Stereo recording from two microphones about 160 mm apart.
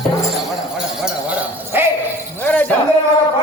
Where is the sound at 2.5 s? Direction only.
10° left (ahead or behind).